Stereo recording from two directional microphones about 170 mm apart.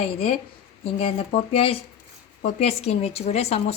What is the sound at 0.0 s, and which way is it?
Speech, 35° left (ahead or behind).